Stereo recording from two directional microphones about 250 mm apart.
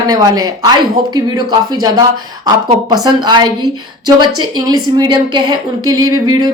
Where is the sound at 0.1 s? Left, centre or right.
Centre.